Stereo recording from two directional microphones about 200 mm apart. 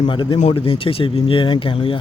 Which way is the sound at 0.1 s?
25° left (ahead or behind).